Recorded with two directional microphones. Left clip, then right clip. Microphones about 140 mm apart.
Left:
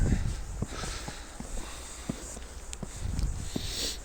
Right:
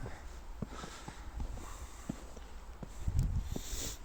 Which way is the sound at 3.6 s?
50° right (ahead or behind).